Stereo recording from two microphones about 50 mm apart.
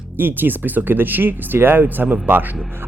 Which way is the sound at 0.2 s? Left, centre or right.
Right.